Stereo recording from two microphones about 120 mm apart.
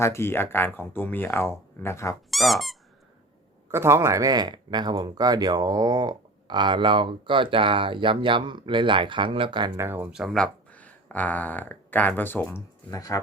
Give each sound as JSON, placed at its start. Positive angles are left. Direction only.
{"t": 0.0, "sound": "speech", "side_deg": 20}
{"t": 2.3, "sound": "speech", "side_deg": 0}
{"t": 3.7, "sound": "speech", "side_deg": -20}
{"t": 9.7, "sound": "speech", "side_deg": -20}
{"t": 10.1, "sound": "speech", "side_deg": -5}
{"t": 10.3, "sound": "speech", "side_deg": 10}